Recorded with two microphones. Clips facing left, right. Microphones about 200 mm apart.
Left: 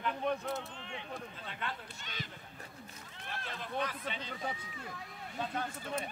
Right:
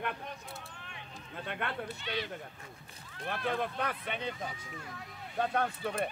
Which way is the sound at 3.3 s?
60° right (ahead or behind).